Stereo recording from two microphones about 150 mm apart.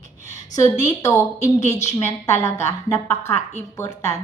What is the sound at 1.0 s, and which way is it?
A woman's voice, 20° left (ahead or behind).